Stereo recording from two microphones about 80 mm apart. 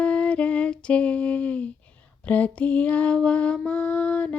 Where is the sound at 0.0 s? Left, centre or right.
Centre.